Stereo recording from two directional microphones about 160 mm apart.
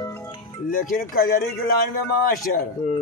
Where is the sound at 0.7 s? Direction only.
60° left (ahead or behind).